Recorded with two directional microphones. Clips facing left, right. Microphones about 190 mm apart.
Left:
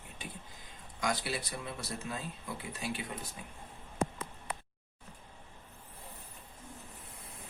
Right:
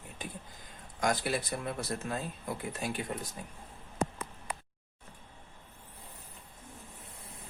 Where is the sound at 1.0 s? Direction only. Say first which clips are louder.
Right 4 dB; 50° right (ahead or behind).